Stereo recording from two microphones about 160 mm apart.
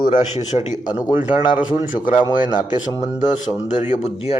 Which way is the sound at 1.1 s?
10° right (ahead or behind).